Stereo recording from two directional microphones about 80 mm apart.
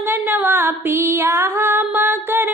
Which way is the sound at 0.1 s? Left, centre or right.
Right.